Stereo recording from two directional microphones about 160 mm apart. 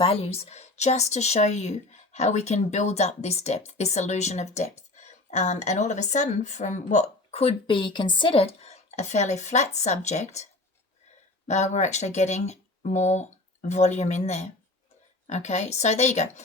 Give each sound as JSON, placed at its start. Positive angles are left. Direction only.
{"t": 0.0, "sound": "speech", "side_deg": 35}
{"t": 11.4, "sound": "speech", "side_deg": 45}